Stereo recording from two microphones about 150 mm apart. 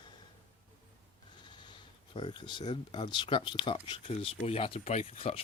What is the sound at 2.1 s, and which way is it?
Speech, 30° left (ahead or behind).